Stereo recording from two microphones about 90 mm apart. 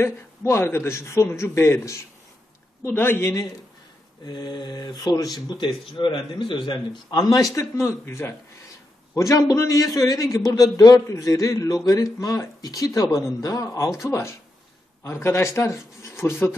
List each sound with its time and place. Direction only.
0.0 s a man's voice: 30° left (ahead or behind)
4.3 s speech: 50° left (ahead or behind)
5.9 s a man's voice: 70° left (ahead or behind)
7.2 s a man's voice: 40° left (ahead or behind)